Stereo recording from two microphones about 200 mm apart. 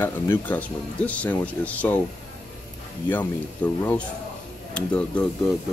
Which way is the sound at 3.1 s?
10° left (ahead or behind).